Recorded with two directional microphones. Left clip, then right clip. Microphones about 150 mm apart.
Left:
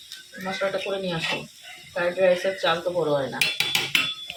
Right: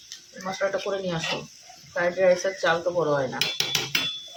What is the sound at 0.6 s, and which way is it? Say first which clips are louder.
Speech: even; 5° right (ahead or behind).